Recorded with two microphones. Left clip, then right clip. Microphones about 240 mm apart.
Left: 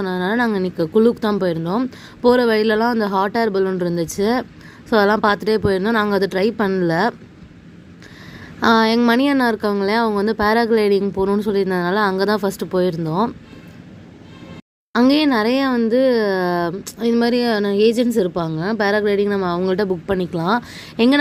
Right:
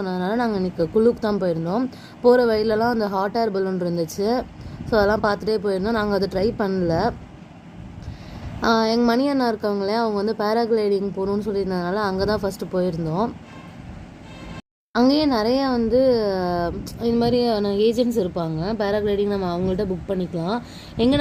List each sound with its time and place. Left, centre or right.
0.0 s speech: left
8.6 s speech: left
15.0 s a woman's voice: left
15.5 s speech: left
15.9 s a woman's voice: left
16.3 s speech: left
17.1 s a woman's voice: left